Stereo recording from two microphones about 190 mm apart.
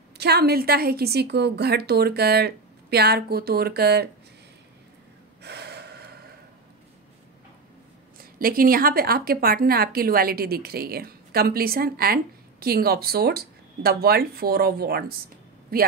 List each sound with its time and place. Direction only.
0.2 s a woman's voice: 55° right (ahead or behind)
5.4 s gasp: 60° right (ahead or behind)
8.2 s a woman's voice: 50° right (ahead or behind)